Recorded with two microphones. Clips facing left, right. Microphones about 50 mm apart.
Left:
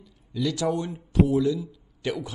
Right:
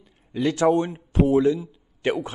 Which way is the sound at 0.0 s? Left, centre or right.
Right.